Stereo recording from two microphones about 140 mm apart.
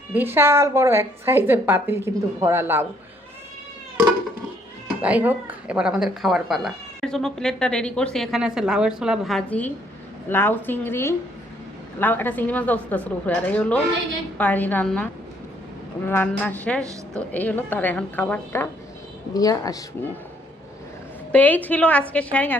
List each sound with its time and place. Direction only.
0.1 s a woman's voice: 15° right (ahead or behind)
5.0 s speech: 10° right (ahead or behind)
9.5 s a woman's voice: 10° left (ahead or behind)
16.0 s a woman's voice: 15° left (ahead or behind)
19.3 s speech: 25° left (ahead or behind)
21.3 s a woman's voice: 10° left (ahead or behind)